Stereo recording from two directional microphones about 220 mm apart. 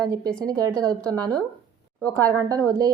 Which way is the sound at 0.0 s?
15° right (ahead or behind).